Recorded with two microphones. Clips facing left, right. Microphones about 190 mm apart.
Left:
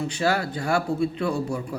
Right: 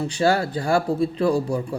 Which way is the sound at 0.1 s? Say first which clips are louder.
Right 7 dB; 30° right (ahead or behind).